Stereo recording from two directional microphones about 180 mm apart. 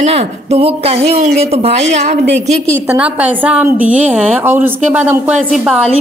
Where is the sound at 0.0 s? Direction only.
35° right (ahead or behind).